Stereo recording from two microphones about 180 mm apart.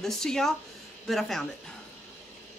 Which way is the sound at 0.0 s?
Centre (ahead or behind).